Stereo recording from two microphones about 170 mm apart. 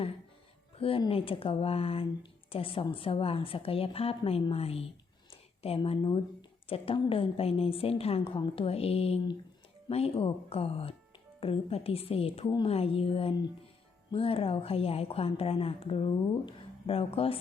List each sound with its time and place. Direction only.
0.8 s a woman's voice: 35° left (ahead or behind)